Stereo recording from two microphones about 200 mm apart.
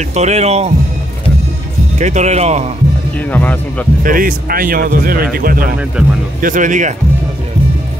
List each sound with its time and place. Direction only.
0.1 s speech: 35° right (ahead or behind)
2.0 s speech: 35° right (ahead or behind)
3.2 s speech: 10° left (ahead or behind)
4.0 s a man's voice: 45° right (ahead or behind)